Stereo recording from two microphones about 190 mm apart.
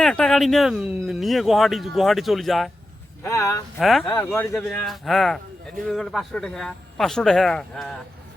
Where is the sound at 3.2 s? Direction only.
15° left (ahead or behind).